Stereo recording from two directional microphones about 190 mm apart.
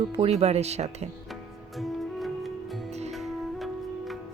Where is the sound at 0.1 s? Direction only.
30° right (ahead or behind).